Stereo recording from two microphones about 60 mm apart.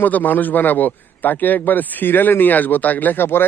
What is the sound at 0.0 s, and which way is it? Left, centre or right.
A man's voice, left.